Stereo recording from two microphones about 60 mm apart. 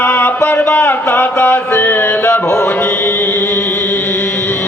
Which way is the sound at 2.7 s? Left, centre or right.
Left.